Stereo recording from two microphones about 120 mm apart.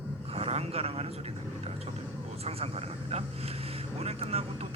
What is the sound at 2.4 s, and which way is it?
A man's voice, 55° right (ahead or behind).